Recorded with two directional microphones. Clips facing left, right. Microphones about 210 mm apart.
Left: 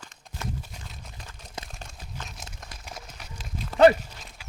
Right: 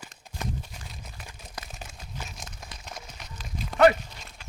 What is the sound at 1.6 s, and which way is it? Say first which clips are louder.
Crumpling: even; 5° right (ahead or behind).